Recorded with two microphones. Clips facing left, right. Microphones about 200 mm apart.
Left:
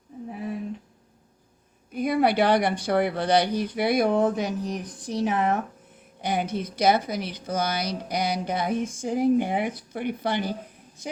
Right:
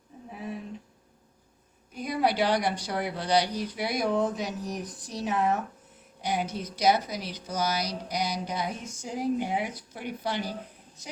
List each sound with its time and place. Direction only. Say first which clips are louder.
1.9 s speech: left 5 dB; 55° left (ahead or behind)